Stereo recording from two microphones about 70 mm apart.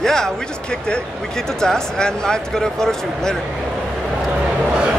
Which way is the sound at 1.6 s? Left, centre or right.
Centre.